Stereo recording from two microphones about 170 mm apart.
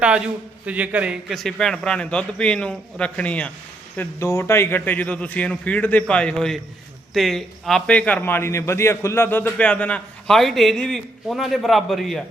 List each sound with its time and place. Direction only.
0.6 s a man's voice: 10° right (ahead or behind)